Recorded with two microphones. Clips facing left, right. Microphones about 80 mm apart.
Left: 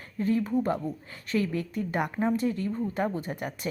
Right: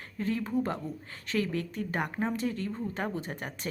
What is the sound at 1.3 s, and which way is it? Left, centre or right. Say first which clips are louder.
Speech: left 3 dB; right.